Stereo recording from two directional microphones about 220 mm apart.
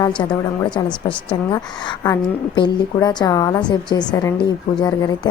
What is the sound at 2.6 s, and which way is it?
A woman's voice, 20° left (ahead or behind).